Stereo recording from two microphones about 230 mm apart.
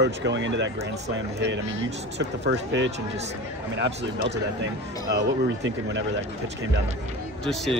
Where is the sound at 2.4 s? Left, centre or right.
Right.